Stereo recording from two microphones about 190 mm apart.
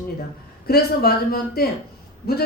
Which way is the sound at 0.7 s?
55° left (ahead or behind).